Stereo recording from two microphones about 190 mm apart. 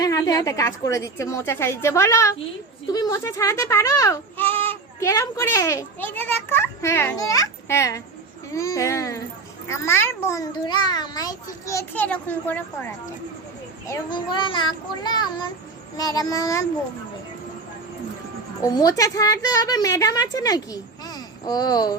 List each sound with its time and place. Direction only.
0.0 s a woman's voice: 20° left (ahead or behind)
13.8 s a woman's voice: 20° left (ahead or behind)
18.6 s a woman's voice: 20° left (ahead or behind)